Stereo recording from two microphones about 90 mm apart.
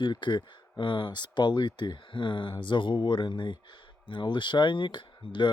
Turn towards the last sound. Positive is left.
turn(degrees=60)  # may be behind; listen again after turning